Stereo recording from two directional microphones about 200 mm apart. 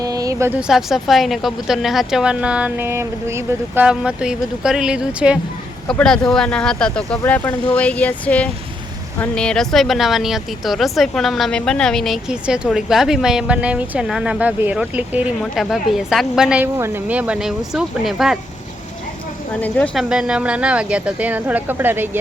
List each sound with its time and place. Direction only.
0.0 s a sound: 20° right (ahead or behind)
0.7 s speech: centre (ahead or behind)
19.6 s speech: 10° left (ahead or behind); by 22.2 s 10° right (ahead or behind)